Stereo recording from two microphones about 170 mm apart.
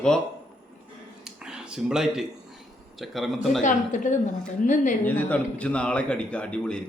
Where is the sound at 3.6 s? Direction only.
45° left (ahead or behind).